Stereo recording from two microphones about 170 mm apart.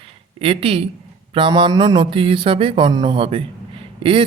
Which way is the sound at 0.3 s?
35° right (ahead or behind).